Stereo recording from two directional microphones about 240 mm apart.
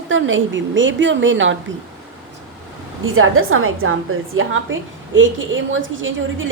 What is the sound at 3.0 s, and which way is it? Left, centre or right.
Speech, right.